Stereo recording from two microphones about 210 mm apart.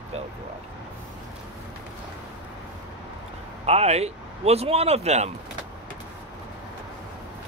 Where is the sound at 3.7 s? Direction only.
30° right (ahead or behind).